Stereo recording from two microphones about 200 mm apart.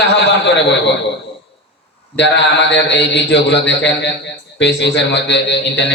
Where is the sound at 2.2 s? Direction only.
60° left (ahead or behind).